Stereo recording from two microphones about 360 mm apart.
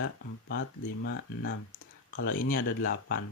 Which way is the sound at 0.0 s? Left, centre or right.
Left.